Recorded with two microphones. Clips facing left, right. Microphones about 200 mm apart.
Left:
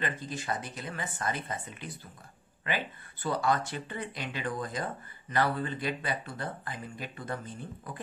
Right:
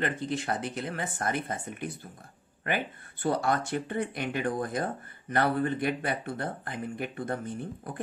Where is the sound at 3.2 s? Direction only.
60° right (ahead or behind).